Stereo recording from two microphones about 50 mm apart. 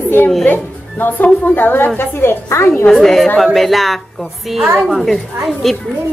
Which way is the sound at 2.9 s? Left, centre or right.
Centre.